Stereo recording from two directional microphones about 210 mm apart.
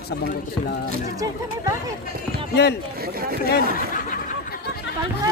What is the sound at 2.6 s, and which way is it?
Speech, 50° left (ahead or behind).